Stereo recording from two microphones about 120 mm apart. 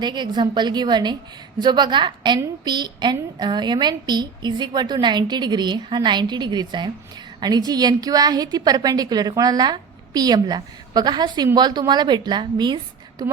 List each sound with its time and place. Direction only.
0.0 s a woman's voice: 40° right (ahead or behind)